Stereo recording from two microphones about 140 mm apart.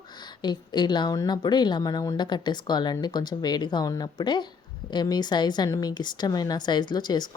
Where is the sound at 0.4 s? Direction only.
30° left (ahead or behind).